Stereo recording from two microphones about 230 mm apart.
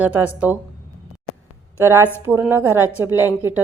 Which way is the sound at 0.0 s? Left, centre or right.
Centre.